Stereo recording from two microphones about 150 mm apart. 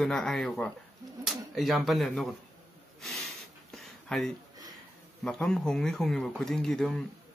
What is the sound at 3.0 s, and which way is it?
Snort, centre (ahead or behind).